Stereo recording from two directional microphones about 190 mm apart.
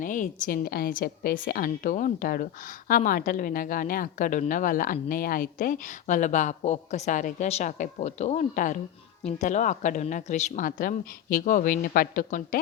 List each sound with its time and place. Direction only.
0.0 s a woman's voice: 45° left (ahead or behind)